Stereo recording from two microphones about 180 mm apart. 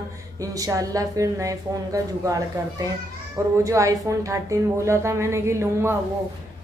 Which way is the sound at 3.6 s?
15° right (ahead or behind).